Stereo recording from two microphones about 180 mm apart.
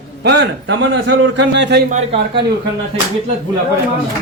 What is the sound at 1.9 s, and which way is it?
Speech, 35° right (ahead or behind).